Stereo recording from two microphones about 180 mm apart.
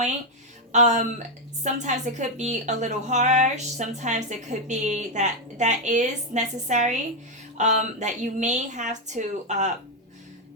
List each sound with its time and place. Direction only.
0.7 s a woman's voice: 40° right (ahead or behind)